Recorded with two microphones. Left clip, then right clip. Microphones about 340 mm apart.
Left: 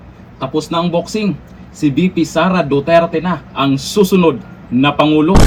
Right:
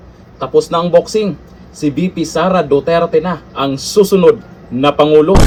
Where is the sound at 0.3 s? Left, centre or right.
Centre.